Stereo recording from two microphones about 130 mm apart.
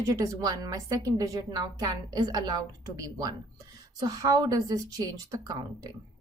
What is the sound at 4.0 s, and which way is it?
A woman's voice, 30° right (ahead or behind).